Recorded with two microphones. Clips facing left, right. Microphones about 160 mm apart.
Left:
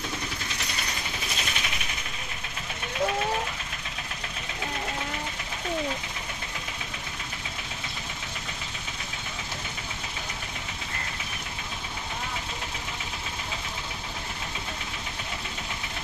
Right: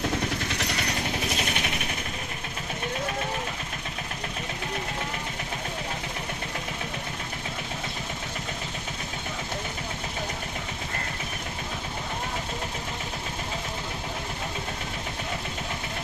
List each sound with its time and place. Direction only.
0.4 s vehicle: 70° right (ahead or behind)